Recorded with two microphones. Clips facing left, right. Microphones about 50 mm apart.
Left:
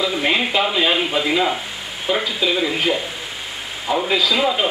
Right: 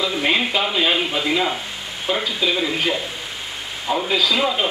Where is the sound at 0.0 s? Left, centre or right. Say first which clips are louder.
Left 1 dB; centre.